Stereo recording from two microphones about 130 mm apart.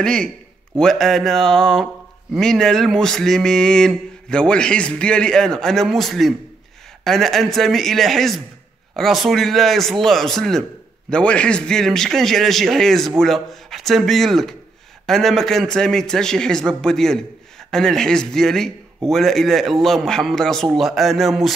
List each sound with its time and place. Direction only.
0.0 s a man's voice: 5° left (ahead or behind)